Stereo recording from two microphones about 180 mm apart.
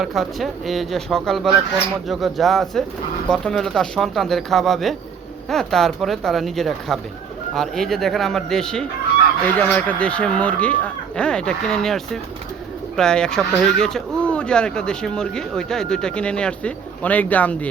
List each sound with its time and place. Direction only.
0.0 s speech: centre (ahead or behind)